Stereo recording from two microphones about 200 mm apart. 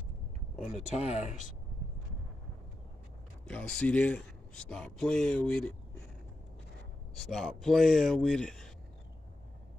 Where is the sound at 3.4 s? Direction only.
5° left (ahead or behind).